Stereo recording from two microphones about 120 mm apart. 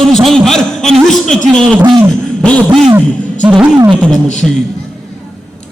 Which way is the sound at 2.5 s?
10° left (ahead or behind).